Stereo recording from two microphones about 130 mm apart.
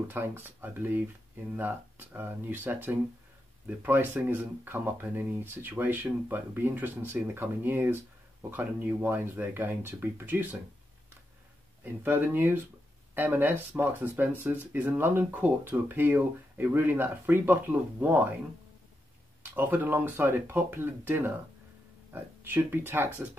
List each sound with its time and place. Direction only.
0.1 s speech: 15° right (ahead or behind)
11.8 s speech: 15° right (ahead or behind)
19.4 s speech: 15° right (ahead or behind)